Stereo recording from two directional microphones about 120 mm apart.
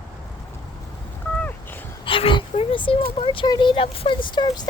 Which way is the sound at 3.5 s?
40° left (ahead or behind).